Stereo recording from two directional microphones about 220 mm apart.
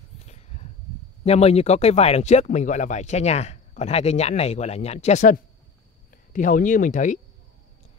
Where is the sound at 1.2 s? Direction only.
30° left (ahead or behind).